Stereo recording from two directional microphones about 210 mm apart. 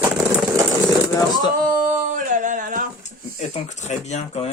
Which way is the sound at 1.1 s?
20° left (ahead or behind).